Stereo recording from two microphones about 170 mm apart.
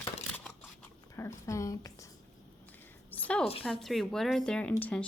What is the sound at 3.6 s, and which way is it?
Speech, centre (ahead or behind).